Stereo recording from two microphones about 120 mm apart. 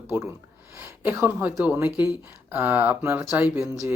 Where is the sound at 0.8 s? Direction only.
20° right (ahead or behind).